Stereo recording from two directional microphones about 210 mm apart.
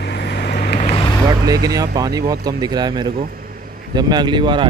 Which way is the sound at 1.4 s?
15° right (ahead or behind).